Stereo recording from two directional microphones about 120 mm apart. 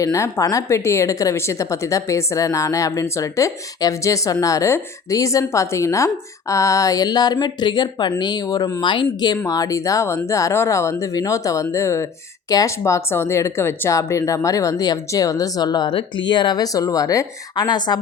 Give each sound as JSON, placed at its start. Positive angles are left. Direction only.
{"t": 0.0, "sound": "a woman's voice", "side_deg": 25}
{"t": 9.5, "sound": "a woman's voice", "side_deg": 30}